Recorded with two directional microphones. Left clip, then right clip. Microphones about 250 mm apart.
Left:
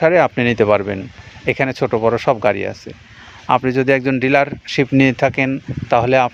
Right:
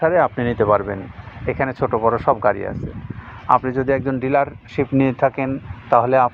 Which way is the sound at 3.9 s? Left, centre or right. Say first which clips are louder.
Left 4 dB; left.